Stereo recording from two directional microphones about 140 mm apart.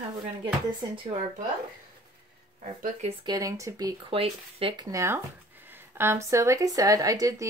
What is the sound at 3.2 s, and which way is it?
Speech, 25° right (ahead or behind).